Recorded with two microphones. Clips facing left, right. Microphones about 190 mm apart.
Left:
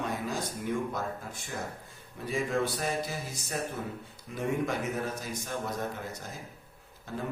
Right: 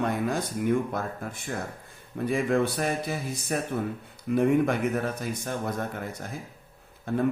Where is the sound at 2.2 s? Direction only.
60° right (ahead or behind).